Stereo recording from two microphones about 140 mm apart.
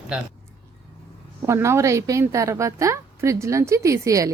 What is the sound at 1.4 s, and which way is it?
A woman's voice, 20° right (ahead or behind).